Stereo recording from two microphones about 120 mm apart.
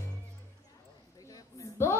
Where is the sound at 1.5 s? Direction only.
25° left (ahead or behind).